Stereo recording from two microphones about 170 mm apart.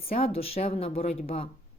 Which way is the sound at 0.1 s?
35° left (ahead or behind).